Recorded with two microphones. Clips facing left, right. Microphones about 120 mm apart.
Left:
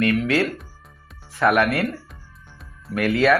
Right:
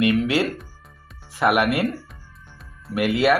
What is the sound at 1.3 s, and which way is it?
Speech, 15° right (ahead or behind).